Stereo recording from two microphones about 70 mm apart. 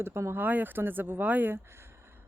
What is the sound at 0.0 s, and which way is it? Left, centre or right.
Speech, right.